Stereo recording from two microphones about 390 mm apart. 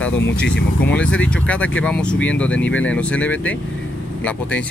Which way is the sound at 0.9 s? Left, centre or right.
Centre.